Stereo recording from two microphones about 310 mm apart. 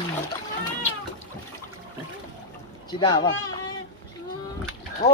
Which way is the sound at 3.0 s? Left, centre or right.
Centre.